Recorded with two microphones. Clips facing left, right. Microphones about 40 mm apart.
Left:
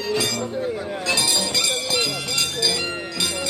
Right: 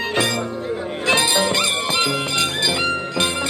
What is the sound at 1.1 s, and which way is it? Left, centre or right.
Music, right.